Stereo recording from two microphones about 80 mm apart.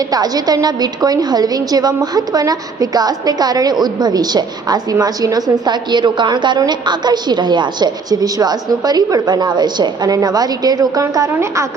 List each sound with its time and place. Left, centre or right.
0.1 s a woman's voice: right